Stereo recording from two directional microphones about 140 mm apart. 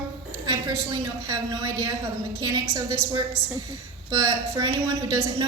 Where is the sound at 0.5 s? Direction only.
20° right (ahead or behind).